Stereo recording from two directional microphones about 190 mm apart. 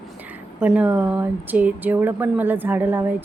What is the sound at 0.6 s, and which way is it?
Speech, 5° right (ahead or behind).